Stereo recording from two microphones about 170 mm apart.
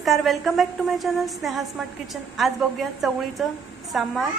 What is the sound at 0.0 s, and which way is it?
A woman's voice, centre (ahead or behind).